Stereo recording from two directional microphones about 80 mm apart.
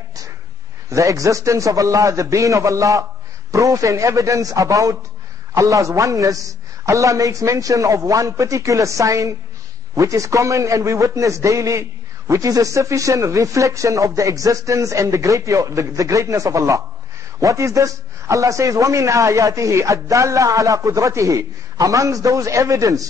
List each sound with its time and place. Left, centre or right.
0.8 s a man's voice: right